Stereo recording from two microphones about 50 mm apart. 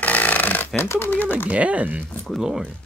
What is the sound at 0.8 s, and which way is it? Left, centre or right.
Speech, left.